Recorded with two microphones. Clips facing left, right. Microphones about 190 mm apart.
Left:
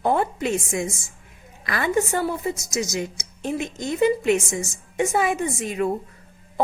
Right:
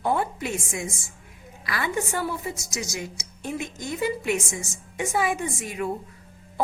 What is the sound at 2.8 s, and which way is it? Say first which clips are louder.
A woman's voice: left 7 dB; 20° left (ahead or behind).